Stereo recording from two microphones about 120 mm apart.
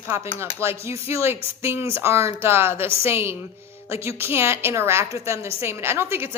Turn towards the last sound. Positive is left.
turn(degrees=-20)  # may be behind; listen again after turning